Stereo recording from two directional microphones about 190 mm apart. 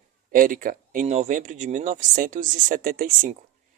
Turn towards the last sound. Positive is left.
turn(degrees=-45)  # may be behind; listen again after turning